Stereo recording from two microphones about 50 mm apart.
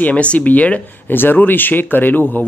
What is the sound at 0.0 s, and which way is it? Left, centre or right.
Speech, left.